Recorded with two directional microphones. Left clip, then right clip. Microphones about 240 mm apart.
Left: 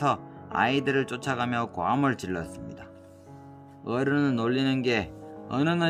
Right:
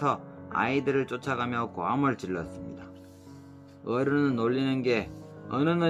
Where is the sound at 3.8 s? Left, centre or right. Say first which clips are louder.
Even; left.